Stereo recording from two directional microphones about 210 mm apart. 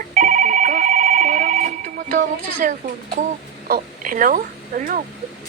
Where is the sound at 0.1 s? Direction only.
40° right (ahead or behind).